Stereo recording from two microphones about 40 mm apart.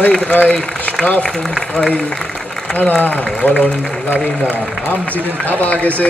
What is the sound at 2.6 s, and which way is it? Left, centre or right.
A man's voice, left.